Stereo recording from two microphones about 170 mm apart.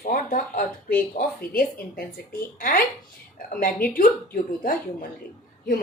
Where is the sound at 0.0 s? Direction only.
55° left (ahead or behind).